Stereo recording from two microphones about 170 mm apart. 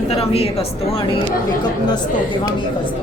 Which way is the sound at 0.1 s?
35° left (ahead or behind).